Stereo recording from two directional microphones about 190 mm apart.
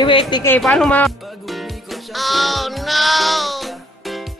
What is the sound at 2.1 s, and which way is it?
Music, centre (ahead or behind).